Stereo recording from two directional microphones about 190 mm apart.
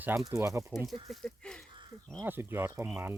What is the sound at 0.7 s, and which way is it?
Speech, centre (ahead or behind).